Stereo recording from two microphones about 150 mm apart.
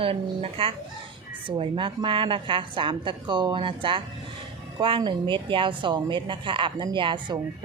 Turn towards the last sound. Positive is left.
turn(degrees=-35)  # may be behind; listen again after turning